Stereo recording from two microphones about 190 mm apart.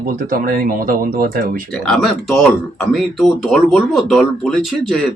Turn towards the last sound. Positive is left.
turn(degrees=0)  # may be behind; listen again after turning